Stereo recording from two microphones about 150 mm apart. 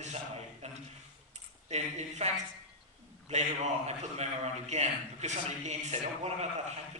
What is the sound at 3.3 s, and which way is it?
A man's voice, 50° right (ahead or behind).